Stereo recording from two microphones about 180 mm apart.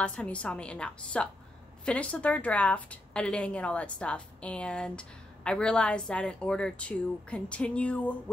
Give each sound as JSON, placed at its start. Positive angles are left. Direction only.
{"t": 0.0, "sound": "a woman's voice", "side_deg": 5}